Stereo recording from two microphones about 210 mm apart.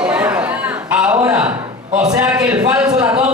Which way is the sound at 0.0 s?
5° right (ahead or behind).